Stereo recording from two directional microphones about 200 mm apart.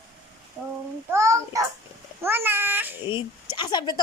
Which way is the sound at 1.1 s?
15° right (ahead or behind).